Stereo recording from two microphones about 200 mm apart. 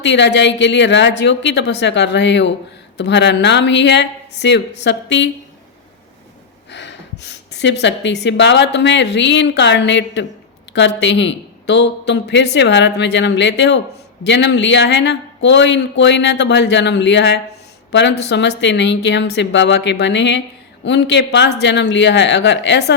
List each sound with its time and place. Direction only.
0.0 s speech: 60° left (ahead or behind)
6.7 s speech: 60° left (ahead or behind)